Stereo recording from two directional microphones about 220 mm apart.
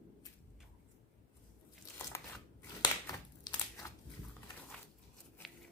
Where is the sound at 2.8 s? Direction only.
20° left (ahead or behind).